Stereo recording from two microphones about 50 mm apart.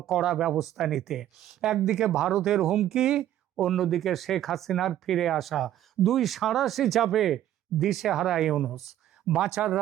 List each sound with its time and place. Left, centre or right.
0.0 s speech: centre
3.5 s speech: centre